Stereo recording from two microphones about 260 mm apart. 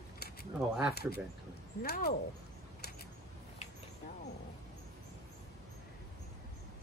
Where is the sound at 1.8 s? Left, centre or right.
Left.